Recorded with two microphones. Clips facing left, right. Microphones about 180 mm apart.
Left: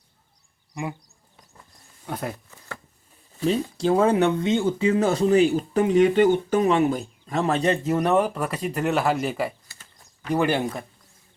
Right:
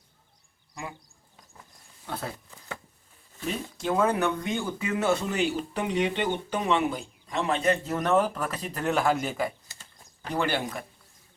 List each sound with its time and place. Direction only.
0.7 s speech: 20° left (ahead or behind)
2.0 s speech: 15° left (ahead or behind)
3.4 s speech: 30° left (ahead or behind)
7.9 s speech: 15° left (ahead or behind)
10.3 s speech: 20° left (ahead or behind)